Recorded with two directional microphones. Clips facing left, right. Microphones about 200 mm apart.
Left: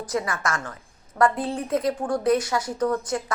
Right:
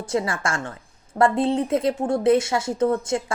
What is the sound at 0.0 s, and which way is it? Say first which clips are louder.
Speech: right 3 dB; 25° right (ahead or behind).